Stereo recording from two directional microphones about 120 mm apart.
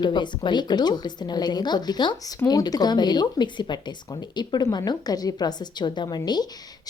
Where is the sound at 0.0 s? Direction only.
40° left (ahead or behind).